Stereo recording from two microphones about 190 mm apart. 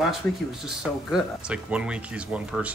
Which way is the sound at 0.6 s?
5° right (ahead or behind).